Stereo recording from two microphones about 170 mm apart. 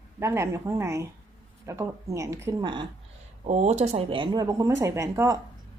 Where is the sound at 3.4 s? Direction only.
40° right (ahead or behind); by 5.3 s 15° right (ahead or behind).